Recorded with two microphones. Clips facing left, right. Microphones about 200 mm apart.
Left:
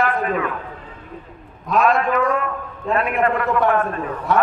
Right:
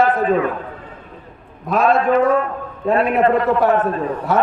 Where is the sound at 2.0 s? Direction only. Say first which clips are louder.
Right 5 dB; 30° right (ahead or behind).